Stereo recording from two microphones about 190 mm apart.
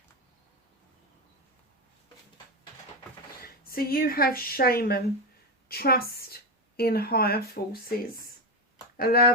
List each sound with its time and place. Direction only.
3.4 s a woman's voice: 50° left (ahead or behind)
9.0 s speech: 55° left (ahead or behind)